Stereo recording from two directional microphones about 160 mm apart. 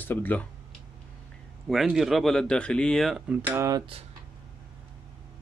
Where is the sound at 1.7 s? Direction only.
Centre (ahead or behind).